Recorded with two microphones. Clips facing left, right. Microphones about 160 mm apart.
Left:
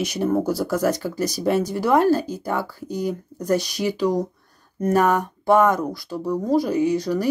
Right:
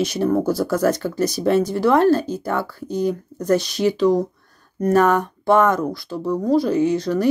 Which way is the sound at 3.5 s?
20° right (ahead or behind).